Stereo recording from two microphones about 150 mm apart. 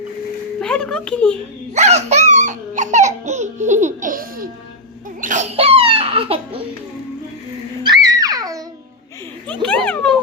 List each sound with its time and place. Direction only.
0.6 s speech: 5° left (ahead or behind)
1.7 s speech: 50° right (ahead or behind); by 4.4 s 70° right (ahead or behind)
5.2 s speech: 55° right (ahead or behind)
7.9 s music: 25° right (ahead or behind)
9.6 s speech: 10° left (ahead or behind)